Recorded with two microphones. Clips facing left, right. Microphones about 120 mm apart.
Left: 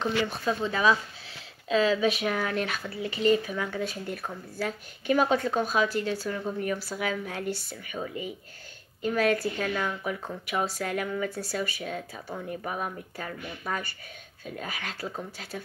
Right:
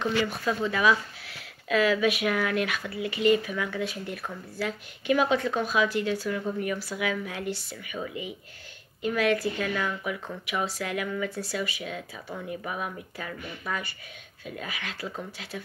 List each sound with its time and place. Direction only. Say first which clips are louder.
0.0 s speech: right 1 dB; 30° left (ahead or behind)